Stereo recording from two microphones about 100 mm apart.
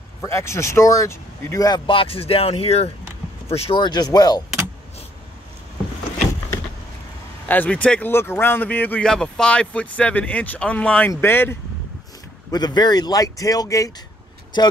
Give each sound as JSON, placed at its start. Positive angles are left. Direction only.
{"t": 0.2, "sound": "speech", "side_deg": 30}
{"t": 1.9, "sound": "speech", "side_deg": 65}
{"t": 3.8, "sound": "speech", "side_deg": 45}
{"t": 7.4, "sound": "speech", "side_deg": 15}
{"t": 8.1, "sound": "speech", "side_deg": 25}
{"t": 9.0, "sound": "speech", "side_deg": 5}
{"t": 12.4, "sound": "speech", "side_deg": 45}